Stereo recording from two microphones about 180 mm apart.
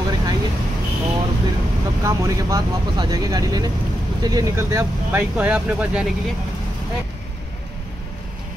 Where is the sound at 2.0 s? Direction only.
20° right (ahead or behind).